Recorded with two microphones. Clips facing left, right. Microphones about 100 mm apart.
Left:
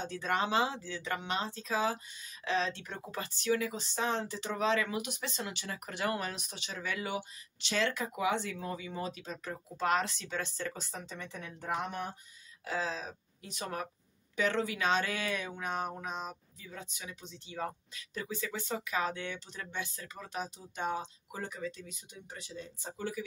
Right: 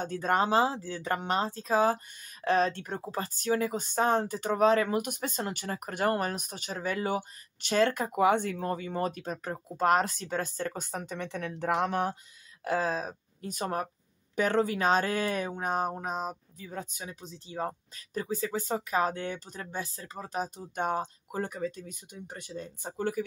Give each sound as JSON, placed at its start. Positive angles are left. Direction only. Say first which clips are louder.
{"t": 0.0, "sound": "speech", "louder": "right 5 dB", "side_deg": -45}
{"t": 12.6, "sound": "speech", "louder": "right 7 dB", "side_deg": -50}